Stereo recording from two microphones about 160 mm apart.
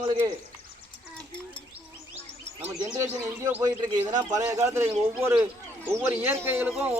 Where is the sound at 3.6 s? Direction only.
25° right (ahead or behind).